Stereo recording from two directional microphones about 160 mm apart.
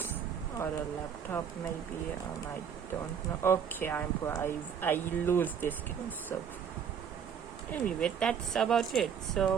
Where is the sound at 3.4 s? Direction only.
15° left (ahead or behind).